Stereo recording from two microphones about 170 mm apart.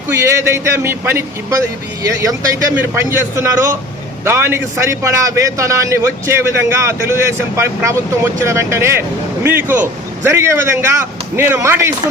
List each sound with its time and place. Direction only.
0.1 s a man's voice: 15° right (ahead or behind)